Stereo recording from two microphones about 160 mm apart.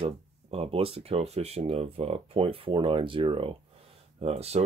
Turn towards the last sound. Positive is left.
turn(degrees=-40)  # may be behind; listen again after turning